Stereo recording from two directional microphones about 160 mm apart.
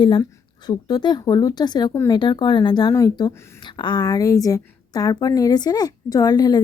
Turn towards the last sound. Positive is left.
turn(degrees=25)  # may be behind; listen again after turning